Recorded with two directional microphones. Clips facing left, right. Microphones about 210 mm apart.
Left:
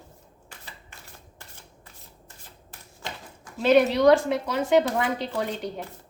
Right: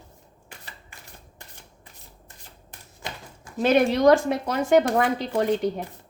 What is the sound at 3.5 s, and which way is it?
Speech, 45° right (ahead or behind).